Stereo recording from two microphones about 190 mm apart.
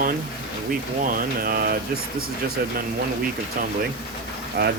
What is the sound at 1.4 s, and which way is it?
Speech, 50° right (ahead or behind).